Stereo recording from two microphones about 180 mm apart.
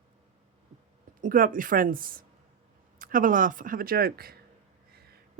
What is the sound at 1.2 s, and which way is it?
Speech, 50° right (ahead or behind).